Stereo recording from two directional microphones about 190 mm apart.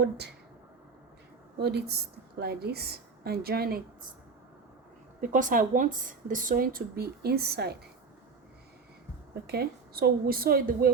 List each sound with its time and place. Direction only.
1.5 s a woman's voice: 60° right (ahead or behind)
5.3 s speech: 45° right (ahead or behind)
9.5 s speech: 55° right (ahead or behind)